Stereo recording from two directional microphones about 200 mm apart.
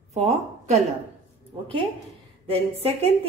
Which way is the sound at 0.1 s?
35° right (ahead or behind).